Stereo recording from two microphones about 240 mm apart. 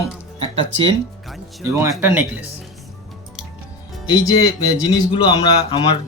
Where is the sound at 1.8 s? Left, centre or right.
Centre.